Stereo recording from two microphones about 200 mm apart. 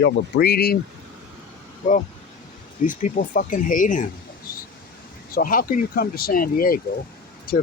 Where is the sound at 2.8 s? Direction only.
40° left (ahead or behind).